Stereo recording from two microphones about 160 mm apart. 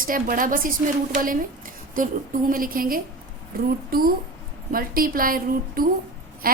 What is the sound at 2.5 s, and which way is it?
A woman's voice, 60° right (ahead or behind).